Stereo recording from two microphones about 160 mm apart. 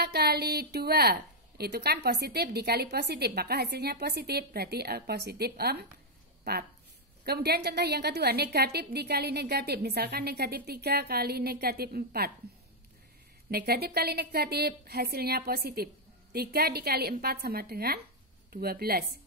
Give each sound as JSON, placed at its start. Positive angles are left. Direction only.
{"t": 0.0, "sound": "a woman's voice", "side_deg": -85}
{"t": 7.2, "sound": "a woman's voice", "side_deg": -85}
{"t": 13.5, "sound": "a woman's voice", "side_deg": -75}